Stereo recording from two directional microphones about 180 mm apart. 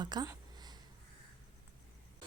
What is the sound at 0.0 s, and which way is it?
Speech, 25° right (ahead or behind).